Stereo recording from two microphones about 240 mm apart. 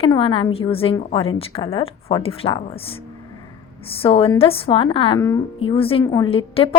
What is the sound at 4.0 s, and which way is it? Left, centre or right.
A woman's voice, left.